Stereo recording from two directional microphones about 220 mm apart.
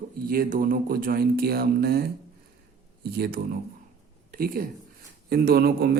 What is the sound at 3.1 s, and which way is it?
Speech, 45° right (ahead or behind).